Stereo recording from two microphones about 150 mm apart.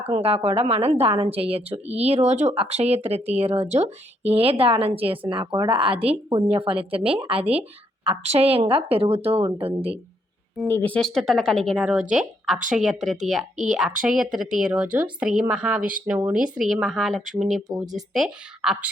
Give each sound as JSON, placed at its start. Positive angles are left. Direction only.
{"t": 0.2, "sound": "speech", "side_deg": -40}
{"t": 10.7, "sound": "speech", "side_deg": 10}